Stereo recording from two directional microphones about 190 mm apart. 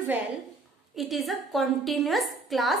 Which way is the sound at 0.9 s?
Centre (ahead or behind).